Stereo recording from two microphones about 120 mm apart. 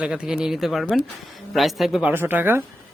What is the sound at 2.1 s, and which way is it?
Speech, 15° right (ahead or behind).